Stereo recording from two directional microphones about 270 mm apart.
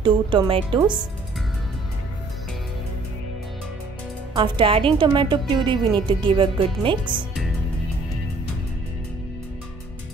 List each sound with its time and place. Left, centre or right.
0.0 s a woman's voice: centre
4.4 s a woman's voice: centre